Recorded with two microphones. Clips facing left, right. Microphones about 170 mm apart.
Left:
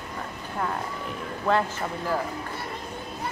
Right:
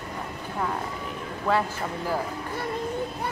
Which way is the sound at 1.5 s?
Centre (ahead or behind).